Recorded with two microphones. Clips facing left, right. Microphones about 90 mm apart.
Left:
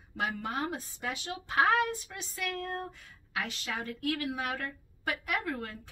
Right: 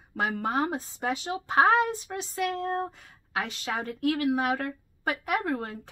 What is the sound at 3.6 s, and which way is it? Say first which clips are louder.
A woman's voice: right 6 dB; 50° right (ahead or behind).